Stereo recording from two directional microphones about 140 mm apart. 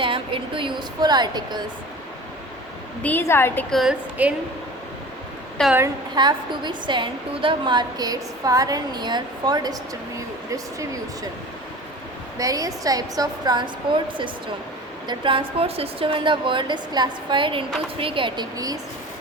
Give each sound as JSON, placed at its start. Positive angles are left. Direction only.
{"t": 0.0, "sound": "speech", "side_deg": -40}
{"t": 3.0, "sound": "a woman's voice", "side_deg": 15}
{"t": 3.7, "sound": "a woman's voice", "side_deg": 0}
{"t": 5.6, "sound": "a woman's voice", "side_deg": 5}
{"t": 6.1, "sound": "a woman's voice", "side_deg": -30}
{"t": 12.4, "sound": "a woman's voice", "side_deg": -25}